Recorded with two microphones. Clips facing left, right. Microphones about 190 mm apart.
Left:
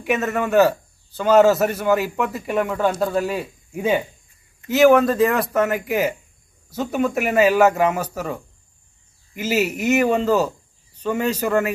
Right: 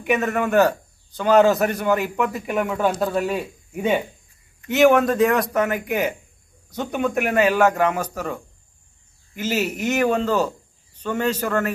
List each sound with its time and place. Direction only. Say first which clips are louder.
0.0 s a man's voice: even; centre (ahead or behind)